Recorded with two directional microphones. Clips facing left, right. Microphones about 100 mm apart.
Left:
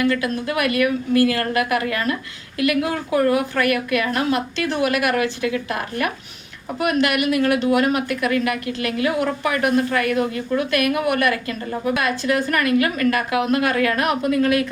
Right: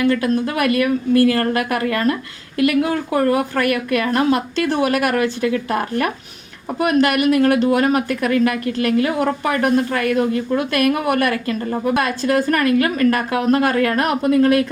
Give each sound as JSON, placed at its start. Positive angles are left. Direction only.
{"t": 0.0, "sound": "speech", "side_deg": -35}